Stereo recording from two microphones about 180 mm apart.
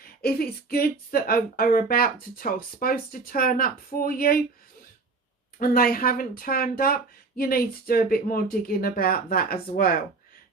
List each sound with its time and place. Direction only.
0.0 s speech: 55° left (ahead or behind)
5.5 s speech: 55° left (ahead or behind)